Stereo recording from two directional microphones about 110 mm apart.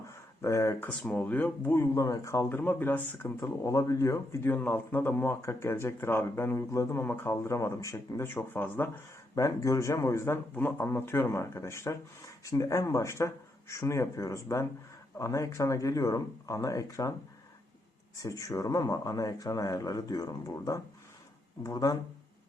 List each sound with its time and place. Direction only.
0.1 s a sound: 30° left (ahead or behind)
0.8 s a man's voice: 15° left (ahead or behind)
9.3 s a man's voice: 30° left (ahead or behind)
18.2 s speech: 30° left (ahead or behind)